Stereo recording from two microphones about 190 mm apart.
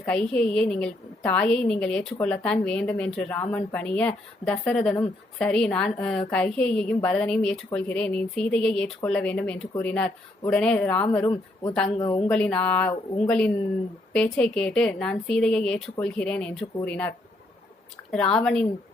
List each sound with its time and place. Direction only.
0.0 s a woman's voice: 5° left (ahead or behind)
11.9 s speech: 25° left (ahead or behind)
12.3 s a woman's voice: 5° left (ahead or behind)